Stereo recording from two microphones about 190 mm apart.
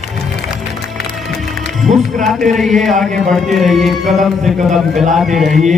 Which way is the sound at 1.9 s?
35° right (ahead or behind).